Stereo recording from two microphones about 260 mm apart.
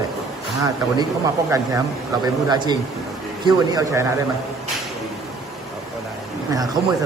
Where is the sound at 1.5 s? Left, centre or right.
Centre.